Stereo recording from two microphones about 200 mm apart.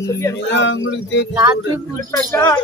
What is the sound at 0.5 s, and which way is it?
Speech, 65° left (ahead or behind).